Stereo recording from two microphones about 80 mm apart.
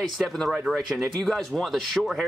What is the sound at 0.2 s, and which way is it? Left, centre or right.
Speech, centre.